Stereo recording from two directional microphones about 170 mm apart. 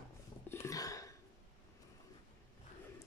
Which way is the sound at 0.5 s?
20° left (ahead or behind).